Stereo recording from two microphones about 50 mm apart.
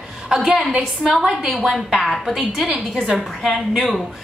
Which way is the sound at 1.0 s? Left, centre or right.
Centre.